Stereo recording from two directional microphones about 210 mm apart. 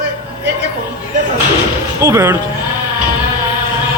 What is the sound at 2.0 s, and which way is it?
Speech, 10° right (ahead or behind).